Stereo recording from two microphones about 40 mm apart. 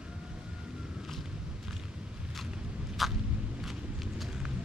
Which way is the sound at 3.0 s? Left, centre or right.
Centre.